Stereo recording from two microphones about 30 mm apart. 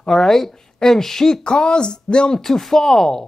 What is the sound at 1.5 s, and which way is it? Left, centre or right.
Speech, left.